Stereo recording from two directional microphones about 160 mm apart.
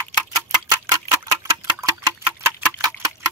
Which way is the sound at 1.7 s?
15° right (ahead or behind).